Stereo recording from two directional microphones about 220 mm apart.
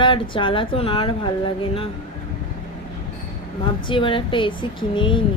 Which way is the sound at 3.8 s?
20° left (ahead or behind).